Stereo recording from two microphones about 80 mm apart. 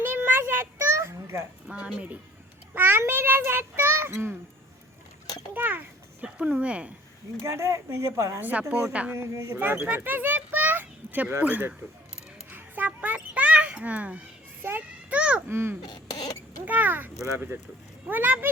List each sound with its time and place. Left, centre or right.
0.0 s a sound: right
1.6 s a child's voice: centre; by 4.1 s right
5.2 s a sound: left
5.5 s a child's voice: right
7.4 s a woman's voice: right
8.4 s a child's voice: right
9.1 s a woman's voice: right
9.8 s a child's voice: right
12.5 s a sound: right
15.4 s a woman's voice: right
15.8 s cough: left
16.6 s a child's voice: right